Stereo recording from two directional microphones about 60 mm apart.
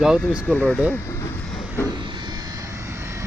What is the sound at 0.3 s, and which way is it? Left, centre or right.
Speech, left.